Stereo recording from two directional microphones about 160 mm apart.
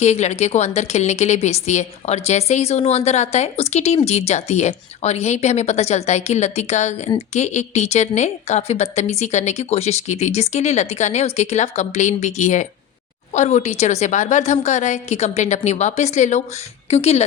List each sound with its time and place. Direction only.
0.0 s a woman's voice: 45° left (ahead or behind)